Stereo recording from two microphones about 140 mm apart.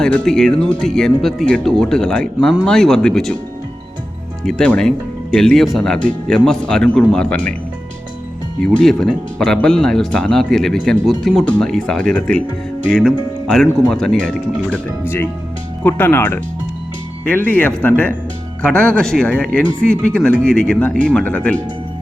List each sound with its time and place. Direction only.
0.0 s speech: 5° left (ahead or behind)
4.4 s speech: 5° left (ahead or behind)
8.6 s speech: 5° left (ahead or behind)